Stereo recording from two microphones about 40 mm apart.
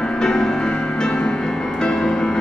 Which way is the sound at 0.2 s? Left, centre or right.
Centre.